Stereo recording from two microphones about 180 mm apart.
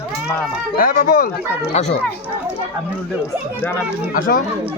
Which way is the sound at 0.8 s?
55° left (ahead or behind).